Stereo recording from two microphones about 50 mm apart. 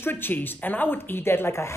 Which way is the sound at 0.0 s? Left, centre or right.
Left.